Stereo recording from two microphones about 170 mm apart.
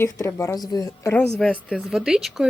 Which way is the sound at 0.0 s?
15° left (ahead or behind).